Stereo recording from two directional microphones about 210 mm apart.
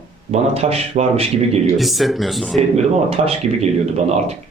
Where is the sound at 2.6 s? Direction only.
30° right (ahead or behind).